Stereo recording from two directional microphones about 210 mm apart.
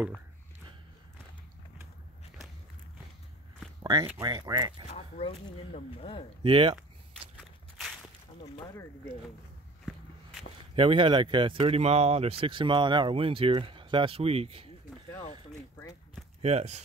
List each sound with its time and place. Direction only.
3.8 s speech: 15° right (ahead or behind)
4.9 s speech: 30° left (ahead or behind)
6.4 s speech: 25° right (ahead or behind)
10.8 s speech: 25° right (ahead or behind)
16.4 s speech: 30° right (ahead or behind)